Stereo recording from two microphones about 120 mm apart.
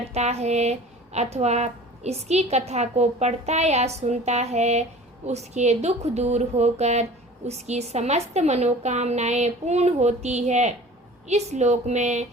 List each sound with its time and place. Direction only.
0.1 s speech: 65° right (ahead or behind)